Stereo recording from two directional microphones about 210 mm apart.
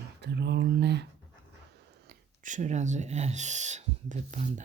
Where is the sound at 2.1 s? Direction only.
35° right (ahead or behind).